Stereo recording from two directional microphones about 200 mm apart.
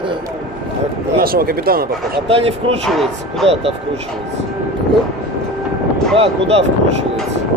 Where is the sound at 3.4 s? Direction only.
30° right (ahead or behind).